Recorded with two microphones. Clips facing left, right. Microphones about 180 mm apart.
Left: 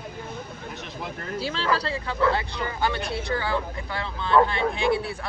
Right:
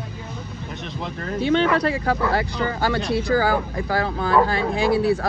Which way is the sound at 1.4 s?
35° left (ahead or behind).